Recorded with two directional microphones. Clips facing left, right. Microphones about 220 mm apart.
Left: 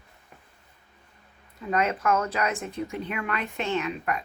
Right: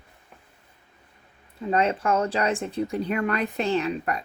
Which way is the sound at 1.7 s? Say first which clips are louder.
Right 2 dB; 30° right (ahead or behind).